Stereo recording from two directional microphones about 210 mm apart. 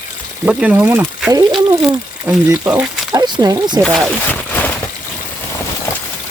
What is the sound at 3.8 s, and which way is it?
Speech, 5° left (ahead or behind).